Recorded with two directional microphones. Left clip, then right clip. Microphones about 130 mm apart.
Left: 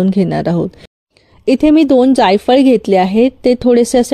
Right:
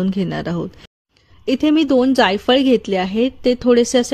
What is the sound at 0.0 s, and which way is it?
Speech, 30° left (ahead or behind).